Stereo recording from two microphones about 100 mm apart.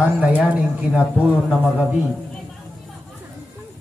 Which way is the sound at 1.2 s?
Centre (ahead or behind).